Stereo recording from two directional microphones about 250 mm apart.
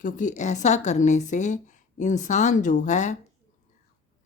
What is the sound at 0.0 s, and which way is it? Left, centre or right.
Speech, left.